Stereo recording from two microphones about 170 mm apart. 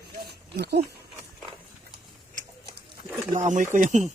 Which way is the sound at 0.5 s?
75° right (ahead or behind).